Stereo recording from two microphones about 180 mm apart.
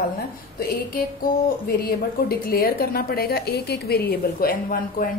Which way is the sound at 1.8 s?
55° left (ahead or behind).